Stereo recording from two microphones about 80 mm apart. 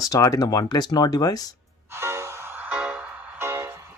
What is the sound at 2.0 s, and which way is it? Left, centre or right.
Music, right.